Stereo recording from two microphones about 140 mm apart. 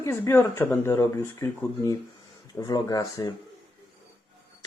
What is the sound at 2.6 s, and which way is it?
Speech, 25° left (ahead or behind).